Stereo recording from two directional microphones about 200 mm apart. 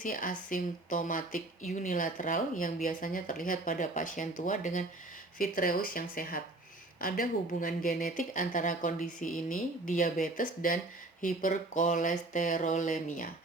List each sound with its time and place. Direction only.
0.0 s a woman's voice: 40° left (ahead or behind)